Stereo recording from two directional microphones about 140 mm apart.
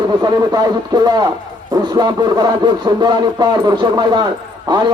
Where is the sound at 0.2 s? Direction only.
30° right (ahead or behind).